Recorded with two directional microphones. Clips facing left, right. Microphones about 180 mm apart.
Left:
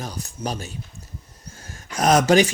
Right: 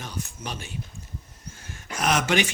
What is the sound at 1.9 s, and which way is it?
Speech, 40° left (ahead or behind).